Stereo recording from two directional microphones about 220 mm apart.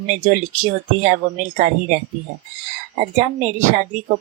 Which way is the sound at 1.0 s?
35° right (ahead or behind).